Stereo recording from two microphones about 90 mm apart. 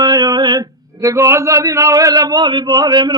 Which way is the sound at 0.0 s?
50° right (ahead or behind).